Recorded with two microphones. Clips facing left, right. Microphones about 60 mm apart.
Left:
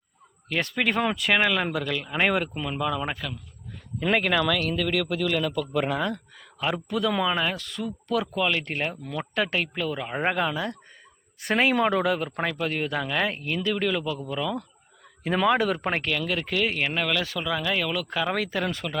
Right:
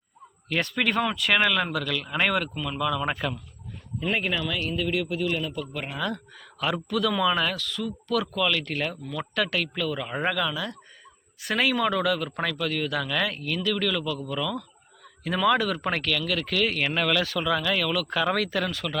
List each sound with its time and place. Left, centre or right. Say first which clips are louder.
0.4 s speech: even; centre
4.0 s a man's voice: left 5 dB; left
6.6 s speech: even; centre
7.5 s a man's voice: right 1 dB; left
10.3 s a man's voice: left 2 dB; left